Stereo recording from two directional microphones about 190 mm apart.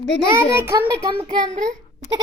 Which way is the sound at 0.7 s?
15° right (ahead or behind).